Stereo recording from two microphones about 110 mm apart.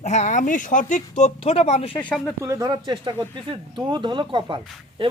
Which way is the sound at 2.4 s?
30° right (ahead or behind).